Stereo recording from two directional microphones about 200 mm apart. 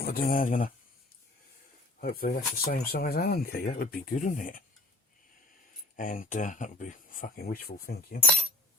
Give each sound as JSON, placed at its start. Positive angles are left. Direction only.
{"t": 0.0, "sound": "speech", "side_deg": 45}
{"t": 2.0, "sound": "speech", "side_deg": 50}
{"t": 6.0, "sound": "speech", "side_deg": 40}